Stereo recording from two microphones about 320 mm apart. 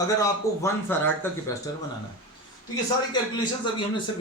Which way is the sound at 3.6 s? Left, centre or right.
Centre.